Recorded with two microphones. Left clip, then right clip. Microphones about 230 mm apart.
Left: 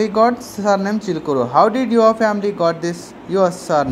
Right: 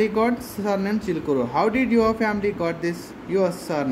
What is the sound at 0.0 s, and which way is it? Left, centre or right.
A woman's voice, centre.